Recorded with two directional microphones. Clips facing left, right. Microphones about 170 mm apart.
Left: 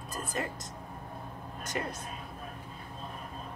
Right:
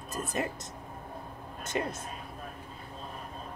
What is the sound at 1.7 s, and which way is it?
Speech, 20° right (ahead or behind).